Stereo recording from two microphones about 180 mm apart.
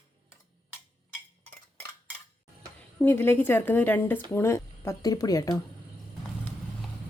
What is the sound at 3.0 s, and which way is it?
A woman's voice, 10° left (ahead or behind).